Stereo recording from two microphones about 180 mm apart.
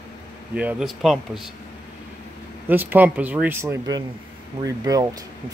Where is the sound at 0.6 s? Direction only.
5° right (ahead or behind).